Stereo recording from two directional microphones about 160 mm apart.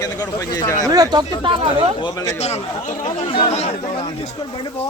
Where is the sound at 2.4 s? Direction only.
45° left (ahead or behind).